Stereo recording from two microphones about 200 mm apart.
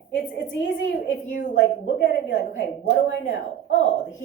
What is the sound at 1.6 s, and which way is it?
A woman's voice, 60° left (ahead or behind).